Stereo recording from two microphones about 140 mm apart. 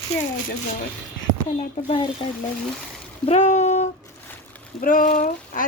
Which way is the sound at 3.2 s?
55° left (ahead or behind).